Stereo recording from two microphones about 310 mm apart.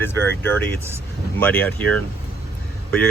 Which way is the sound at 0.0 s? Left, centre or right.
Centre.